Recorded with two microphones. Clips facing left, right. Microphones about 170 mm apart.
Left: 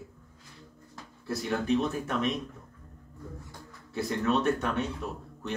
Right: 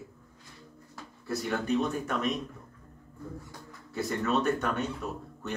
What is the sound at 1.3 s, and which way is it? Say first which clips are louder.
A man's voice: left 1 dB; centre (ahead or behind).